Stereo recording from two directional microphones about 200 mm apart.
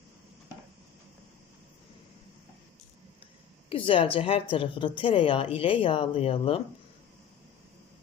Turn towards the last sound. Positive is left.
turn(degrees=25)  # may be behind; listen again after turning